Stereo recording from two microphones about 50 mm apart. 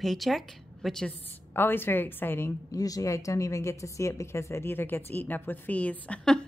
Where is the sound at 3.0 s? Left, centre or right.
Left.